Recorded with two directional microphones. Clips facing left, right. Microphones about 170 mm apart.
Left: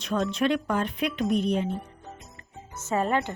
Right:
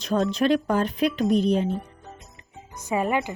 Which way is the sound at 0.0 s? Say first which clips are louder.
Right 3 dB; 35° right (ahead or behind).